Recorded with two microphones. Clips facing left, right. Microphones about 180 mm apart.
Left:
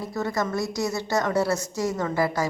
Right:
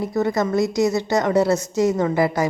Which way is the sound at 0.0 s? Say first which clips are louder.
Right 6 dB; 20° right (ahead or behind).